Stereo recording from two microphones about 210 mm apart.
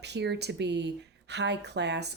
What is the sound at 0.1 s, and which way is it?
Speech, 55° right (ahead or behind).